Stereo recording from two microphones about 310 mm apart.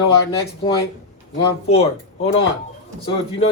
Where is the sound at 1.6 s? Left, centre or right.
Centre.